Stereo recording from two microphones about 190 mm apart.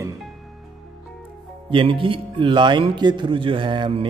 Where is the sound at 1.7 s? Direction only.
25° right (ahead or behind).